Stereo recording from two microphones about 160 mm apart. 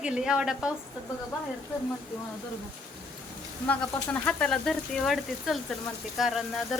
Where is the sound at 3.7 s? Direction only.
10° left (ahead or behind).